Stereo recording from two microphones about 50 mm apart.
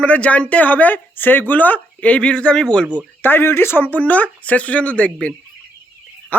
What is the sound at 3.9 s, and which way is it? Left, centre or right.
Speech, left.